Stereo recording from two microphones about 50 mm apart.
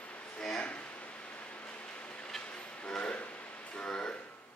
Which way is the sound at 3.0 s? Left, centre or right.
Left.